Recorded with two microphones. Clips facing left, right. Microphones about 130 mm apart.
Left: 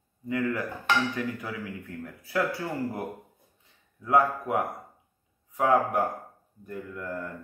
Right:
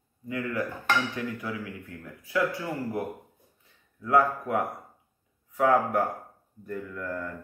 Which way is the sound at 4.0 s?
20° left (ahead or behind).